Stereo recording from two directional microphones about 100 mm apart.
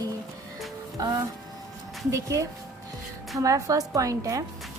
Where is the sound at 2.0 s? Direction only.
30° right (ahead or behind).